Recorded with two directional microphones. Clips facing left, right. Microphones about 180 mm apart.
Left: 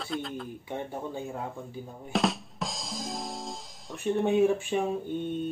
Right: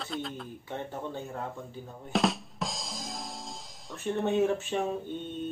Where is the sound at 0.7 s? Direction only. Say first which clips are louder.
Left 1 dB; 10° left (ahead or behind).